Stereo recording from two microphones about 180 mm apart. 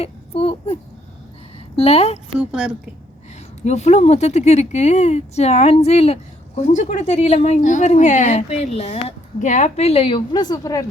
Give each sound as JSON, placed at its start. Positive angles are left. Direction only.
{"t": 0.0, "sound": "a sound", "side_deg": 35}
{"t": 1.7, "sound": "speech", "side_deg": 35}
{"t": 2.4, "sound": "a woman's voice", "side_deg": -5}
{"t": 3.6, "sound": "speech", "side_deg": 40}